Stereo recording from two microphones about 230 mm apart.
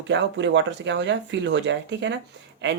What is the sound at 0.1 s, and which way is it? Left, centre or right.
Speech, right.